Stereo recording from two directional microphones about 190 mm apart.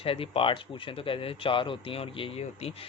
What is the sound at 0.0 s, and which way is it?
Speech, 30° left (ahead or behind).